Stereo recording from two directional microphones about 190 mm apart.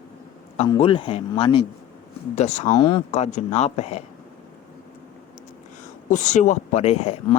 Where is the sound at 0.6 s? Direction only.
25° left (ahead or behind).